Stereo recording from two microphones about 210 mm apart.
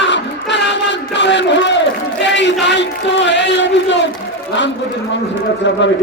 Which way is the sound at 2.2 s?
55° left (ahead or behind).